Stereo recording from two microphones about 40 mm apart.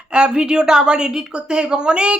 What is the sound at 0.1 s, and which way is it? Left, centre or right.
A woman's voice, right.